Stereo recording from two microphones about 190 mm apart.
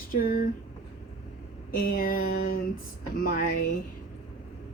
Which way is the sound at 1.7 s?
50° left (ahead or behind).